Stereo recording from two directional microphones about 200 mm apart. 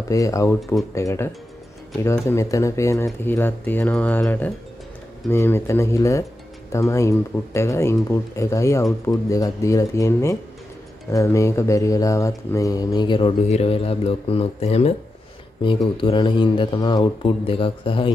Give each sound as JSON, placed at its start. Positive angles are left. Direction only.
{"t": 0.1, "sound": "speech", "side_deg": 15}
{"t": 16.0, "sound": "speech", "side_deg": 25}